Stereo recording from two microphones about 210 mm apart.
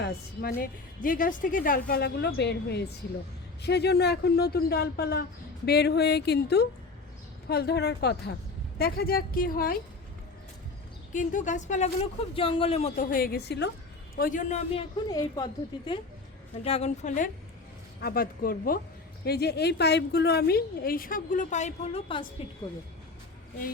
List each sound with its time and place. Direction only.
0.0 s a woman's voice: 45° left (ahead or behind)
11.1 s speech: 35° left (ahead or behind)
14.2 s speech: 40° left (ahead or behind)
16.6 s a woman's voice: 30° left (ahead or behind)